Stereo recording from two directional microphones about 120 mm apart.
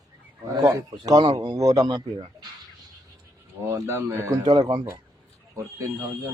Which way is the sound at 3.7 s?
20° right (ahead or behind).